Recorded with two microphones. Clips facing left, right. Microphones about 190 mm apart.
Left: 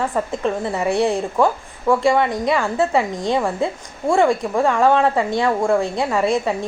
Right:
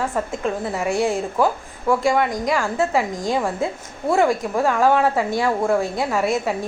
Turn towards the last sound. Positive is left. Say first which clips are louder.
# left 2 dB
turn(degrees=0)  # may be behind; listen again after turning